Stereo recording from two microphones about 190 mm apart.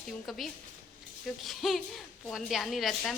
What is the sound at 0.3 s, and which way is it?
Speech, centre (ahead or behind).